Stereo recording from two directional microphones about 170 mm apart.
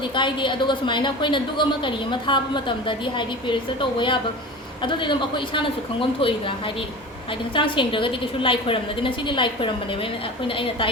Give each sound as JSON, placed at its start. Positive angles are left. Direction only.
{"t": 0.0, "sound": "a woman's voice", "side_deg": 30}
{"t": 7.5, "sound": "a woman's voice", "side_deg": 30}